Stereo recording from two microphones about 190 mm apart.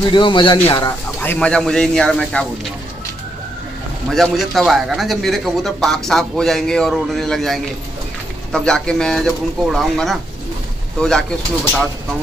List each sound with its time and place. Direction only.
0.0 s speech: 25° left (ahead or behind)
1.2 s a man's voice: 10° left (ahead or behind)
4.1 s a man's voice: centre (ahead or behind)